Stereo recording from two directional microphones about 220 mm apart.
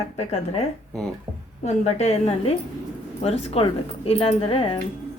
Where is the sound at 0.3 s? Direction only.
30° left (ahead or behind).